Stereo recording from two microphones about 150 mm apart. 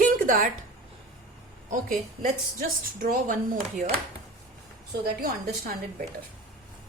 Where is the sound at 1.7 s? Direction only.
60° right (ahead or behind).